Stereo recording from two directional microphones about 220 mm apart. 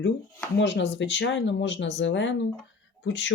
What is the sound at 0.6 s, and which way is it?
Speech, 55° left (ahead or behind).